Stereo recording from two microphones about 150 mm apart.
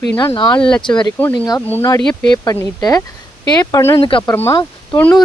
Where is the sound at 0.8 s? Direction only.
30° left (ahead or behind).